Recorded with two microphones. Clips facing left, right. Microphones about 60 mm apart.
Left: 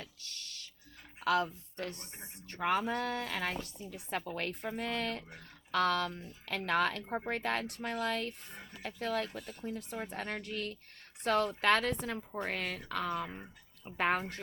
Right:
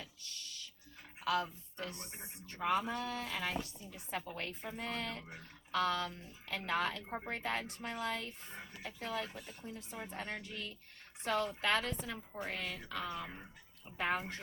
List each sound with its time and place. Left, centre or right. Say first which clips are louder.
0.0 s music: left 2 dB; left
1.2 s speech: left 4 dB; left
1.9 s speech: left 1 dB; centre
2.5 s speech: left 3 dB; left
8.4 s speech: even; centre
9.0 s speech: left 6 dB; left